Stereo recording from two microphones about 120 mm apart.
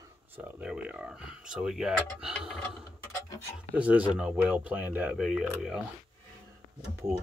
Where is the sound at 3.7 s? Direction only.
10° right (ahead or behind).